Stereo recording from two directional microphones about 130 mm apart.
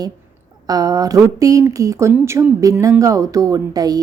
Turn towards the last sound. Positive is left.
turn(degrees=-30)  # may be behind; listen again after turning